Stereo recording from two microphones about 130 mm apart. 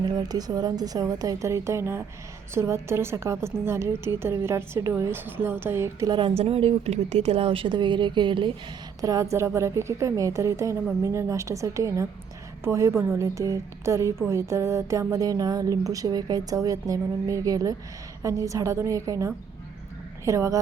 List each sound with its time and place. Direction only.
0.0 s a woman's voice: 30° right (ahead or behind)
6.1 s a woman's voice: 45° right (ahead or behind)
9.0 s a woman's voice: 25° right (ahead or behind)